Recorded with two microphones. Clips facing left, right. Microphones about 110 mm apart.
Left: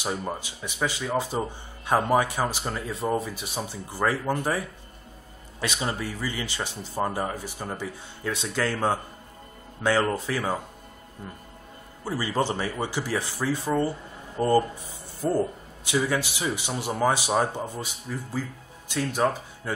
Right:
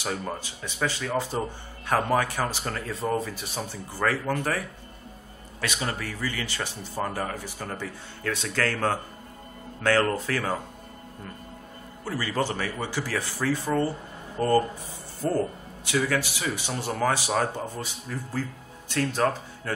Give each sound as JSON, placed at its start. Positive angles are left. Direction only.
{"t": 0.0, "sound": "speech", "side_deg": 15}
{"t": 12.0, "sound": "speech", "side_deg": 20}